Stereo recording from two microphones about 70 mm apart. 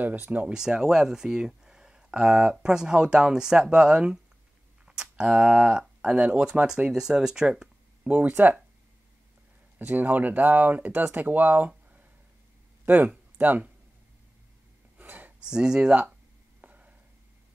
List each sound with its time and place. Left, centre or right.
0.0 s speech: right
0.5 s speech: centre
8.2 s speech: right
9.8 s speech: right
15.0 s a sound: right
15.4 s speech: centre
16.6 s a sound: right